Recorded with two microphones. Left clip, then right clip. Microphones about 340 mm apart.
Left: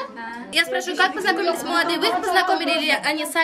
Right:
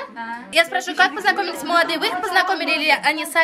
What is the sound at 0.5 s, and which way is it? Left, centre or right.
A woman's voice, centre.